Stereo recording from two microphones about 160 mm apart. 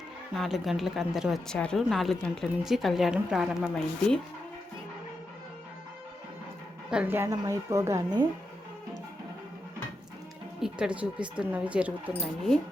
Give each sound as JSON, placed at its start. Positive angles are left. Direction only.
{"t": 0.3, "sound": "speech", "side_deg": 0}
{"t": 6.9, "sound": "speech", "side_deg": -10}
{"t": 10.6, "sound": "speech", "side_deg": -5}